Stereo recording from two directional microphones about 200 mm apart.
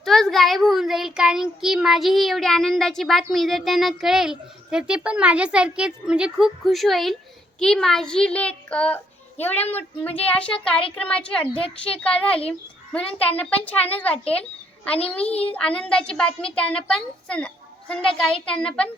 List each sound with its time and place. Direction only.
0.0 s a child's voice: centre (ahead or behind)
14.9 s a child's voice: 30° left (ahead or behind)
15.5 s a child's voice: 5° left (ahead or behind)